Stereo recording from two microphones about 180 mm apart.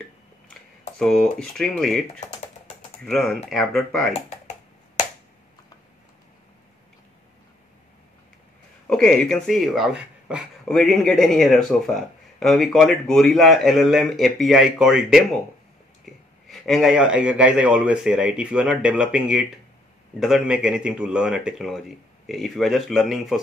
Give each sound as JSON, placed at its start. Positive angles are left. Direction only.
{"t": 0.9, "sound": "speech", "side_deg": 5}
{"t": 4.1, "sound": "computer keyboard", "side_deg": 35}
{"t": 8.8, "sound": "speech", "side_deg": 5}
{"t": 16.4, "sound": "speech", "side_deg": 0}